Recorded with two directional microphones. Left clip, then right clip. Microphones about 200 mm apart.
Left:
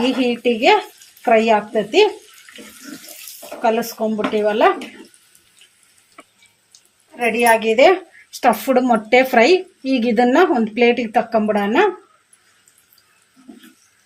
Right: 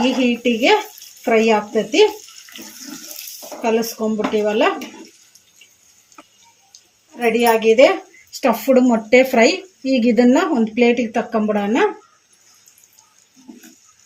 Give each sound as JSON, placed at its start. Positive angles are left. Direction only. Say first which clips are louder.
{"t": 0.2, "sound": "a woman's voice", "louder": "even", "side_deg": 55}
{"t": 3.6, "sound": "speech", "louder": "left 1 dB", "side_deg": 55}
{"t": 7.3, "sound": "speech", "louder": "right 1 dB", "side_deg": 50}